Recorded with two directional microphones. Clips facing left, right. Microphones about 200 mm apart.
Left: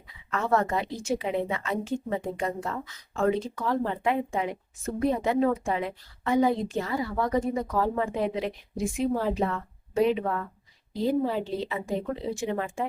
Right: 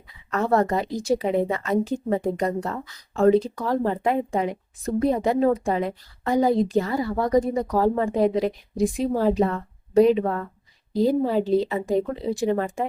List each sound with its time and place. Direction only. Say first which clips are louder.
0.3 s speech: right 5 dB; 40° right (ahead or behind)